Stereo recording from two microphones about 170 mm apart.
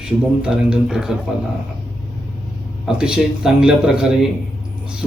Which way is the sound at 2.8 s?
5° right (ahead or behind).